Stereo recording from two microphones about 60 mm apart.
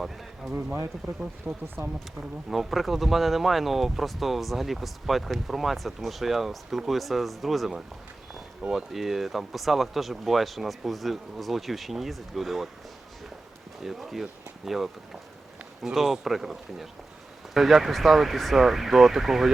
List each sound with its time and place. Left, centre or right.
0.4 s speech: centre
1.5 s speech: right
2.5 s speech: centre
13.8 s speech: centre